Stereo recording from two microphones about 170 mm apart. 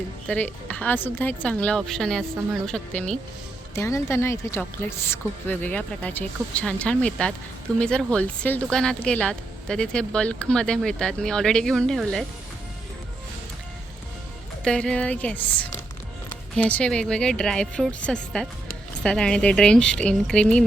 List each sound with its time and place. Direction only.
0.3 s a woman's voice: 10° left (ahead or behind)
3.8 s a woman's voice: 15° left (ahead or behind)
14.6 s a woman's voice: 5° left (ahead or behind)